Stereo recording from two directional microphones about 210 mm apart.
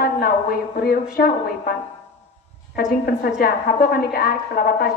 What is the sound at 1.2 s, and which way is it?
Speech, 45° left (ahead or behind).